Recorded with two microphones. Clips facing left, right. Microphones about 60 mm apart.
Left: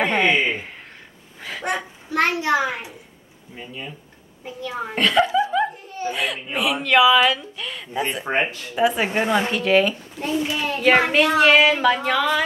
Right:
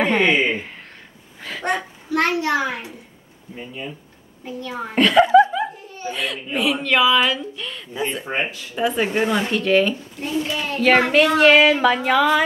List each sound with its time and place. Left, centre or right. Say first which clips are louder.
0.0 s speech: right 1 dB; centre
1.4 s a sound: right 2 dB; centre
2.0 s a child's voice: even; left
3.5 s a child's voice: right 2 dB; centre